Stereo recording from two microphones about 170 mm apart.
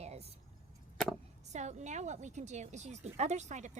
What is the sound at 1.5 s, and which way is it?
A woman's voice, 45° right (ahead or behind).